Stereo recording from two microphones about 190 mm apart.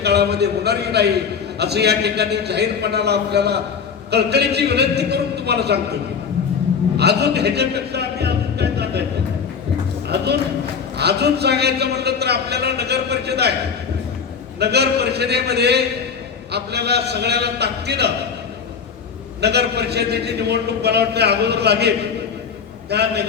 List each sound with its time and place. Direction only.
0.0 s a man's voice: 60° right (ahead or behind)
6.9 s a sound: 60° right (ahead or behind)
10.9 s a man's voice: 60° right (ahead or behind)
14.6 s a man's voice: 60° right (ahead or behind)
19.4 s a man's voice: 60° right (ahead or behind)